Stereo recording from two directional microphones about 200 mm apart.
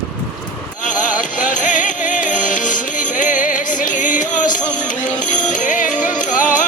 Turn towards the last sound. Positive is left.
turn(degrees=40)  # may be behind; listen again after turning